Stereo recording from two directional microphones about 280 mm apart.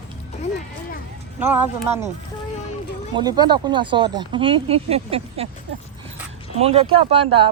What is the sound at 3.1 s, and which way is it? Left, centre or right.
Speech, centre.